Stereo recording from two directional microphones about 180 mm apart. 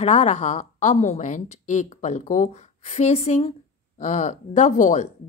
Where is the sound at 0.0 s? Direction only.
40° left (ahead or behind).